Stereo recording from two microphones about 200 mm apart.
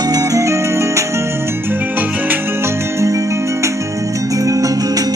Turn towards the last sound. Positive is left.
turn(degrees=-20)  # may be behind; listen again after turning